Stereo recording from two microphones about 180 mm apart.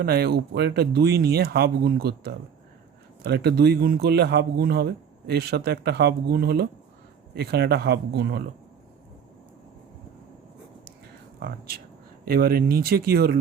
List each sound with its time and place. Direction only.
0.0 s a man's voice: 60° right (ahead or behind)
11.3 s a man's voice: 60° right (ahead or behind)